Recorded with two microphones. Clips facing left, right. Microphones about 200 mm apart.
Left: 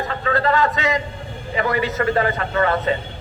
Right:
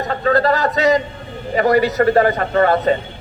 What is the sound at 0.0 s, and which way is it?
A man's voice, 40° right (ahead or behind).